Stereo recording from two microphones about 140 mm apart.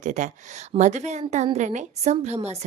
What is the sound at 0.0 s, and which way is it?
A woman's voice, 60° right (ahead or behind).